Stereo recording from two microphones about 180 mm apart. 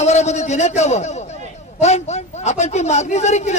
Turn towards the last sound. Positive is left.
turn(degrees=40)  # may be behind; listen again after turning